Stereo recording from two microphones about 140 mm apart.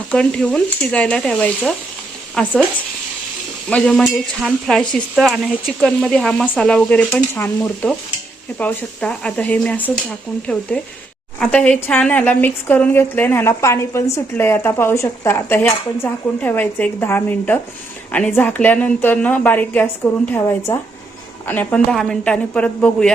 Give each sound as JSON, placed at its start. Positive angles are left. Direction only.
{"t": 0.1, "sound": "a woman's voice", "side_deg": 5}
{"t": 3.7, "sound": "a woman's voice", "side_deg": 5}